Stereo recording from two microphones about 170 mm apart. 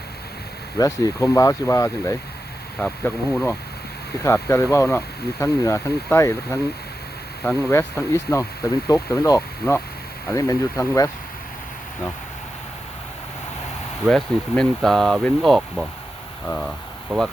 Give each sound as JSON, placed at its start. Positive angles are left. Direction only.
{"t": 0.8, "sound": "speech", "side_deg": 20}
{"t": 14.0, "sound": "speech", "side_deg": 0}